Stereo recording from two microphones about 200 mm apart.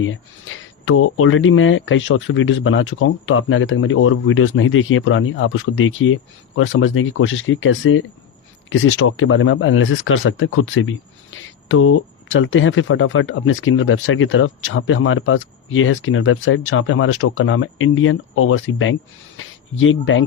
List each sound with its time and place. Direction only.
0.0 s speech: 80° left
6.6 s speech: 90° left